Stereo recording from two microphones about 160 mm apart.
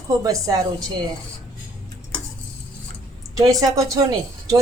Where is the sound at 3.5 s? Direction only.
20° right (ahead or behind).